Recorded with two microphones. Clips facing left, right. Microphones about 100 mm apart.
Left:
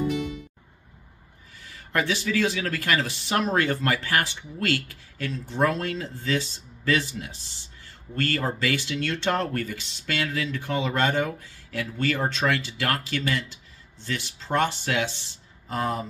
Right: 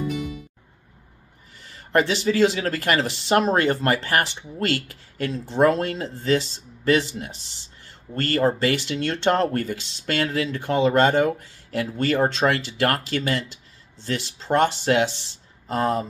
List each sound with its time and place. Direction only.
1.9 s speech: 30° right (ahead or behind)
8.1 s speech: 30° right (ahead or behind)